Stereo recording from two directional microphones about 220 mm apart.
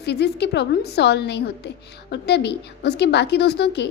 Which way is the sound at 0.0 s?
50° left (ahead or behind).